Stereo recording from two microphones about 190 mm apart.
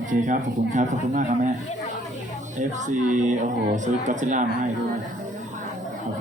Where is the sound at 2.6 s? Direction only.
40° right (ahead or behind).